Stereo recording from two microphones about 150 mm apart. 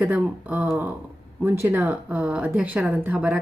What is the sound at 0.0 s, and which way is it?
Speech, 10° right (ahead or behind).